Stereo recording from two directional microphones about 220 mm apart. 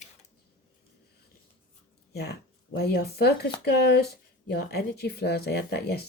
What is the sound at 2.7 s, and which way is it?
Speech, 45° left (ahead or behind).